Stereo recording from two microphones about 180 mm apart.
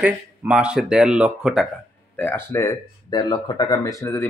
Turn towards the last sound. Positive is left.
turn(degrees=15)  # may be behind; listen again after turning